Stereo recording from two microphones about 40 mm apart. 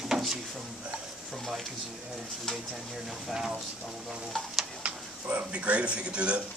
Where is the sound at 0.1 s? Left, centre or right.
Centre.